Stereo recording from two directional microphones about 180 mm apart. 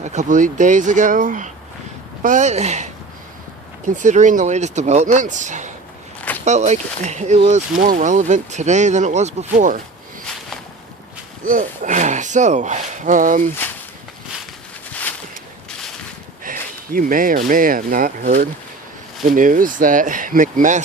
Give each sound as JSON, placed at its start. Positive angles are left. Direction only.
{"t": 0.0, "sound": "speech", "side_deg": -40}
{"t": 11.4, "sound": "speech", "side_deg": -45}
{"t": 16.4, "sound": "a sound", "side_deg": -50}
{"t": 17.5, "sound": "speech", "side_deg": -50}